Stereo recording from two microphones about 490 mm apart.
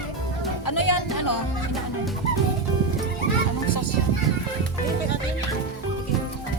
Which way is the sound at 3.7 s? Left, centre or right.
Left.